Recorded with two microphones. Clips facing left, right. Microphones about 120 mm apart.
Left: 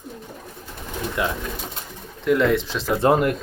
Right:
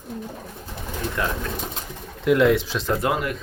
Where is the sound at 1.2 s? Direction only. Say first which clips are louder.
Left 2 dB; 15° left (ahead or behind).